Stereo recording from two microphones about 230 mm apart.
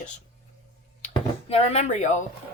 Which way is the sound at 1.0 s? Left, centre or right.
Left.